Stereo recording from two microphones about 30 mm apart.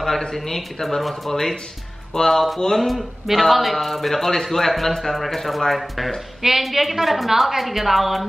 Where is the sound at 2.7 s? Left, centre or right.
Centre.